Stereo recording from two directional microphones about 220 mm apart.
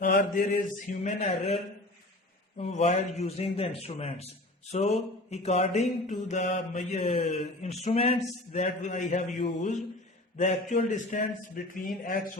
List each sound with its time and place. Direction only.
0.0 s a man's voice: 40° left (ahead or behind)
2.6 s mantra: 30° left (ahead or behind)
8.5 s a man's voice: 30° left (ahead or behind)